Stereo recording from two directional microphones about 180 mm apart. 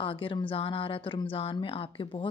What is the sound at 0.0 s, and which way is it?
Speech, 30° left (ahead or behind).